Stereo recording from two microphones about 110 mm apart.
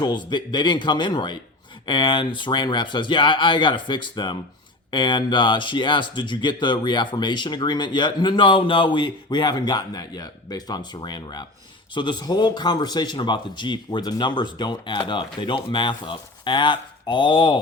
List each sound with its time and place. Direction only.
0.0 s speech: 40° left (ahead or behind)